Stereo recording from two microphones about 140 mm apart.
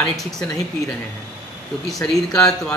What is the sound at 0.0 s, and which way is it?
Speech, 5° left (ahead or behind).